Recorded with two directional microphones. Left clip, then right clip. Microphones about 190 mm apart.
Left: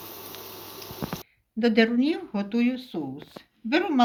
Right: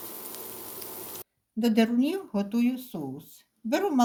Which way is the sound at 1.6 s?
45° right (ahead or behind).